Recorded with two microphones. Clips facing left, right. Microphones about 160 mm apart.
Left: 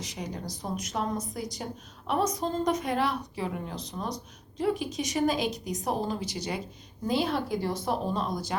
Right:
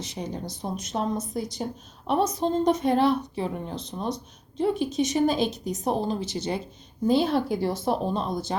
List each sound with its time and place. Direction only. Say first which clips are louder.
0.0 s a woman's voice: right 3 dB; 25° right (ahead or behind)